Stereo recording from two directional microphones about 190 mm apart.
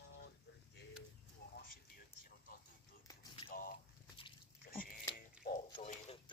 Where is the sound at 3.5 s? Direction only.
50° left (ahead or behind).